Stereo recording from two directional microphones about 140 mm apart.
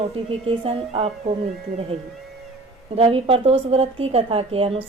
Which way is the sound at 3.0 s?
45° right (ahead or behind).